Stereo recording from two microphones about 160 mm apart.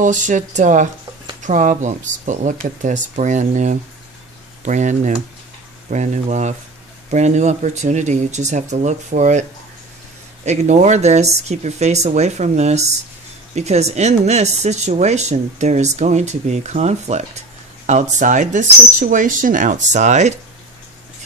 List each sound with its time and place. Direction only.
0.0 s speech: 50° right (ahead or behind)